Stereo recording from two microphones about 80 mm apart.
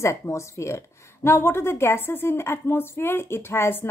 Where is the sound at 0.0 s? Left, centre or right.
Left.